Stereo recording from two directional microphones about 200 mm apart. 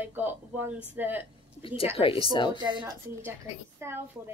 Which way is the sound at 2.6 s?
20° right (ahead or behind).